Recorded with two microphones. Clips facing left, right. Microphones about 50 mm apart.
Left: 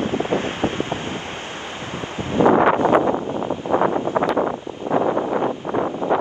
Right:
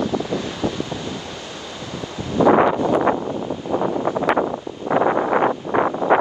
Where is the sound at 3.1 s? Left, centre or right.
Left.